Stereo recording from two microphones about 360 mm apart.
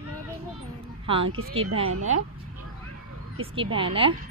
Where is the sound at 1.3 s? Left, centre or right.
Right.